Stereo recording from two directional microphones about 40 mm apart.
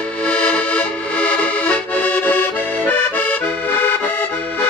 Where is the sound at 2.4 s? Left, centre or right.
Left.